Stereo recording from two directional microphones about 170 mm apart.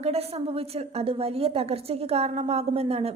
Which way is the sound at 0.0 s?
35° right (ahead or behind).